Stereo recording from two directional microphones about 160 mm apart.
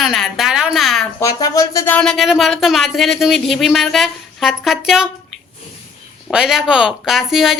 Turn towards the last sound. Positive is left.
turn(degrees=0)  # may be behind; listen again after turning